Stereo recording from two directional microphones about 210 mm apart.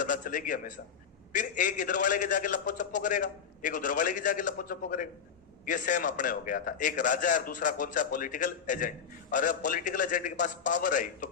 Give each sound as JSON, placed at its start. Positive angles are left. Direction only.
{"t": 0.0, "sound": "a man's voice", "side_deg": 40}